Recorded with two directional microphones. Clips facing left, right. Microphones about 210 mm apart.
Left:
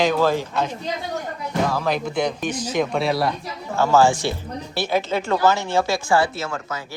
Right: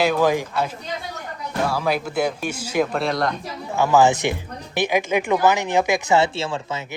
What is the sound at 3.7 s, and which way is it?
Speech, 15° right (ahead or behind).